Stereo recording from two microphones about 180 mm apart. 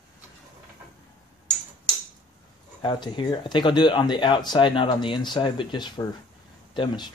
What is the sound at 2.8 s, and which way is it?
Speech, 25° left (ahead or behind).